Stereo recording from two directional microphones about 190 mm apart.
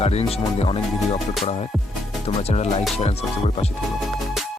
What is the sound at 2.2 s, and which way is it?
Music, 35° left (ahead or behind).